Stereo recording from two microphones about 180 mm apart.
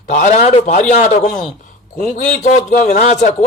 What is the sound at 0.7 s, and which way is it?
A man's voice, 40° left (ahead or behind).